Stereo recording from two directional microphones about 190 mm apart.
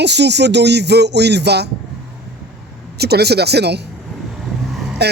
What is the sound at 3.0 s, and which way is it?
Speech, 60° right (ahead or behind).